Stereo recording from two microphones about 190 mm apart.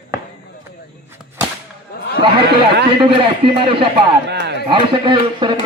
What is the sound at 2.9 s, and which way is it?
A man's voice, 25° right (ahead or behind).